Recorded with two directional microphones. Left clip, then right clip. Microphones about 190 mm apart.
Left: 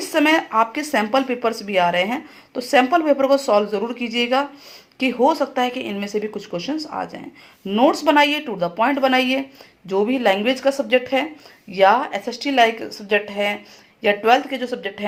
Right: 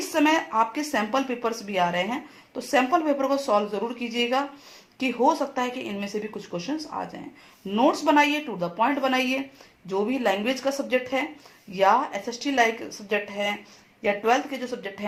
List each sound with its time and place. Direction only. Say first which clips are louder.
0.1 s speech: left 5 dB; 25° left (ahead or behind)